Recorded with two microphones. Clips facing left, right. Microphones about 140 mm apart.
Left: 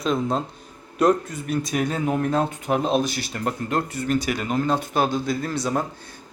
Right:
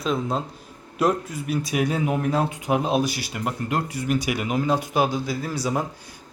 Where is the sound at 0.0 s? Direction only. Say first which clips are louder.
Left 2 dB; centre (ahead or behind).